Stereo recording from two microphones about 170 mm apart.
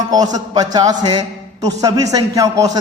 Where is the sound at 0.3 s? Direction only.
25° right (ahead or behind).